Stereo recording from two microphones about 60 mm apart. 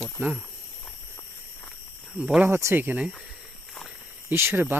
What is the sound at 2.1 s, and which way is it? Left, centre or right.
Speech, centre.